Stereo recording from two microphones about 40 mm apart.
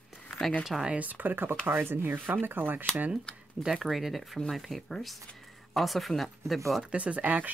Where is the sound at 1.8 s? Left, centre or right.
Right.